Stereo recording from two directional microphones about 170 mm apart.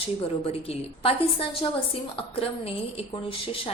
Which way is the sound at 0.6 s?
35° left (ahead or behind).